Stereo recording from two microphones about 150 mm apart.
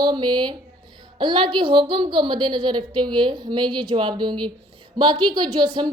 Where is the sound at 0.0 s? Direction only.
30° right (ahead or behind).